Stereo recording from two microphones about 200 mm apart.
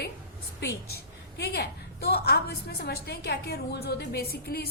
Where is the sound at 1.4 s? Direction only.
55° left (ahead or behind).